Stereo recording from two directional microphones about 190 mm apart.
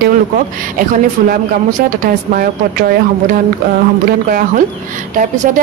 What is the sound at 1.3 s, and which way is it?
A woman's voice, 45° right (ahead or behind).